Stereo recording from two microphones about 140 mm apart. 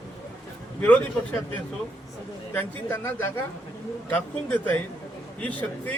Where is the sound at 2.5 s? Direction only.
15° left (ahead or behind).